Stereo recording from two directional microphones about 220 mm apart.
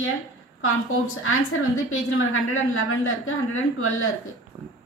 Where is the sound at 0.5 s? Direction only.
65° left (ahead or behind).